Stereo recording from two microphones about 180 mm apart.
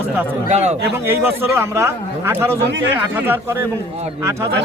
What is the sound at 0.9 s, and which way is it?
Speech, 15° right (ahead or behind).